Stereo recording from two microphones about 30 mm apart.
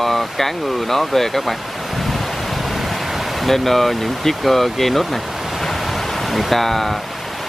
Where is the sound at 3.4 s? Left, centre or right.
Centre.